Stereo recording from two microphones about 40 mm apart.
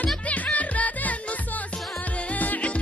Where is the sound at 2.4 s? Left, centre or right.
Left.